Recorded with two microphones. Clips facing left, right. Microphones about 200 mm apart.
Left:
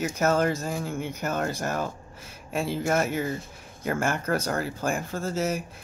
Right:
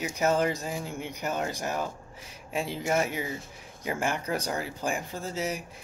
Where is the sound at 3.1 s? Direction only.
50° left (ahead or behind).